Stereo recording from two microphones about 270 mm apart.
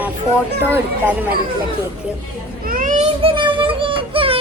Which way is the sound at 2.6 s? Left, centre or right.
Right.